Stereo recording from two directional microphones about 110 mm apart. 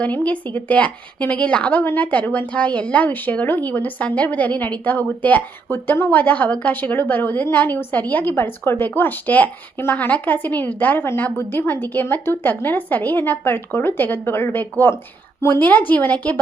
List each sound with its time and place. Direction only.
0.0 s a woman's voice: 15° left (ahead or behind)